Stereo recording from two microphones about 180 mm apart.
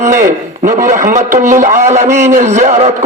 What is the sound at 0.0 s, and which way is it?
A man's voice, 45° right (ahead or behind).